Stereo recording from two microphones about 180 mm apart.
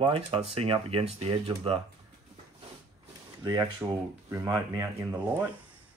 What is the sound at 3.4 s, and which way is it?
Speech, 20° right (ahead or behind).